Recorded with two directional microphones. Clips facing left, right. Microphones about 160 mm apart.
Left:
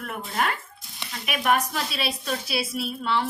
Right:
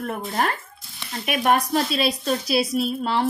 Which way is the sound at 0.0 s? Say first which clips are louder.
Right 3 dB; 35° right (ahead or behind).